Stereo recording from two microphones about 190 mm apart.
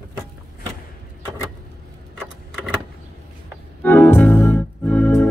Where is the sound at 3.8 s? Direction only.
10° left (ahead or behind).